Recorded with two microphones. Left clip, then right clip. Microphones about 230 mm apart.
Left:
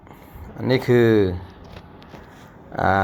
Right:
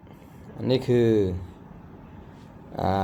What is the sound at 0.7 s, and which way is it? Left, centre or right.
Speech, centre.